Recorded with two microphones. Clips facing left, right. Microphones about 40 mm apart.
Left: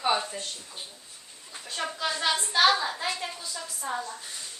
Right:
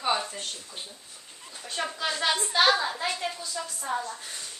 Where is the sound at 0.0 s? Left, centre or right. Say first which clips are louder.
Left 1 dB; centre.